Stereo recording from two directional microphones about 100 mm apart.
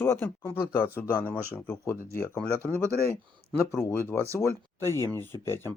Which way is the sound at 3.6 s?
25° left (ahead or behind).